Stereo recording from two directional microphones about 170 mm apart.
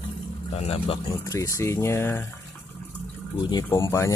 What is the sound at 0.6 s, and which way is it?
Speech, 35° left (ahead or behind).